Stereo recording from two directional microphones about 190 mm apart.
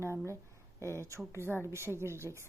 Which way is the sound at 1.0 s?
15° right (ahead or behind).